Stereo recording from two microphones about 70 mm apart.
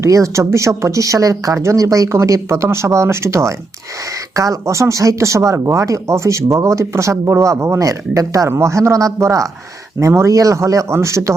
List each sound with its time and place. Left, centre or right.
0.0 s speech: right
8.4 s speech: right